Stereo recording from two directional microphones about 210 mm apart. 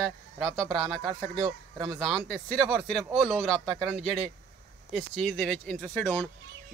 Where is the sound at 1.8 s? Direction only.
Centre (ahead or behind).